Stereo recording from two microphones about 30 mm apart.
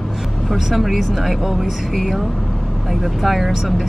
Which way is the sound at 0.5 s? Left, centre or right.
Centre.